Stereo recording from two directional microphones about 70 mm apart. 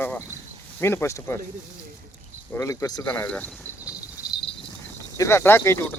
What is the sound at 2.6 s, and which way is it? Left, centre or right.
Speech, left.